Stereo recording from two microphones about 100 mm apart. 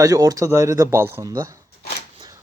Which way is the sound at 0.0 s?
35° right (ahead or behind).